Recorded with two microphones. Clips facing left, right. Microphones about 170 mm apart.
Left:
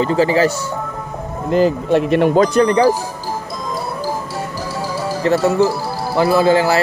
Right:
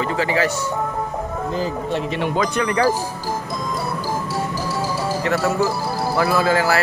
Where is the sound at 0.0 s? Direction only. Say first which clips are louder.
Left 6 dB; 35° left (ahead or behind).